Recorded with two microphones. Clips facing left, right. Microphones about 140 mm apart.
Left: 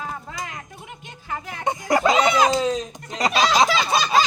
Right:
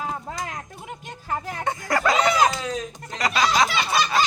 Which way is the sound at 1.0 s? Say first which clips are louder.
Right 3 dB; 35° right (ahead or behind).